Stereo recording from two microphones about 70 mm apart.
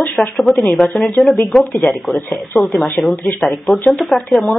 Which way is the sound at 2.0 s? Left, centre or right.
Centre.